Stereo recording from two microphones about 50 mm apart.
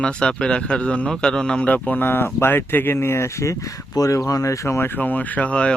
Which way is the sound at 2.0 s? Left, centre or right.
Left.